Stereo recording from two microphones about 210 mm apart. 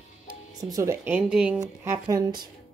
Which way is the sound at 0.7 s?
15° right (ahead or behind).